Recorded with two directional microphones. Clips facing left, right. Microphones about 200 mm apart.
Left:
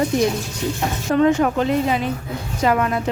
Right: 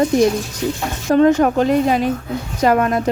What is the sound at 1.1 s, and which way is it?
Speech, 40° right (ahead or behind).